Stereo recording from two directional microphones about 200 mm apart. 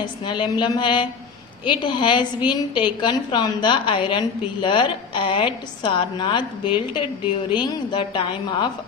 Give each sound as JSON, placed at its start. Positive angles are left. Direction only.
{"t": 0.0, "sound": "a woman's voice", "side_deg": 25}